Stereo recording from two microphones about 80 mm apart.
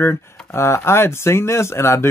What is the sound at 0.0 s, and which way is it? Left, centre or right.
Speech, left.